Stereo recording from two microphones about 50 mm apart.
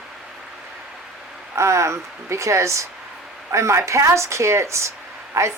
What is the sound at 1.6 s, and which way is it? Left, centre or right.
Speech, right.